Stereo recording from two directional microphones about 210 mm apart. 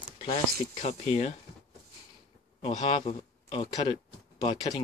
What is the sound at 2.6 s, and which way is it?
A man's voice, 25° left (ahead or behind).